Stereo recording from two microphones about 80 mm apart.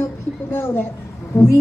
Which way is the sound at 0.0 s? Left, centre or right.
Left.